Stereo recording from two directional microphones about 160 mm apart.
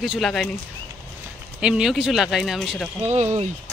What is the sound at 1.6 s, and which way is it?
Speech, 5° right (ahead or behind).